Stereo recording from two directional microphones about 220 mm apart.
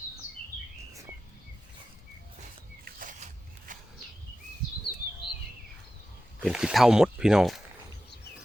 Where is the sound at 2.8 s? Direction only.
35° right (ahead or behind).